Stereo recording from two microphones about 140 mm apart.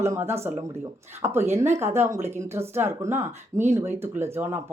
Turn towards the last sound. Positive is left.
turn(degrees=-15)  # may be behind; listen again after turning